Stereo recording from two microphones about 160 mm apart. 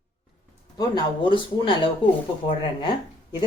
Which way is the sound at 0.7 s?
25° left (ahead or behind).